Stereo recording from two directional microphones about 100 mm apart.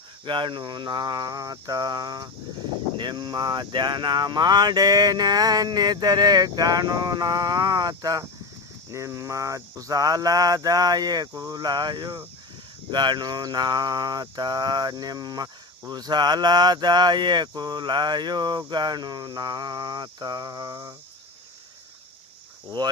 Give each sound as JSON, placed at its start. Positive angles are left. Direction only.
{"t": 0.3, "sound": "speech", "side_deg": -55}
{"t": 8.9, "sound": "cricket", "side_deg": -30}
{"t": 12.9, "sound": "speech", "side_deg": -50}
{"t": 22.8, "sound": "speech", "side_deg": -50}